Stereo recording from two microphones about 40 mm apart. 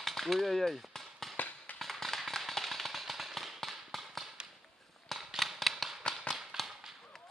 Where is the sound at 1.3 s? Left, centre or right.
Left.